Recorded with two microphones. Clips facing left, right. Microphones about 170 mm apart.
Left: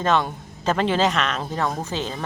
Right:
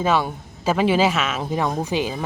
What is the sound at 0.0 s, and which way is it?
A man's voice, 10° right (ahead or behind).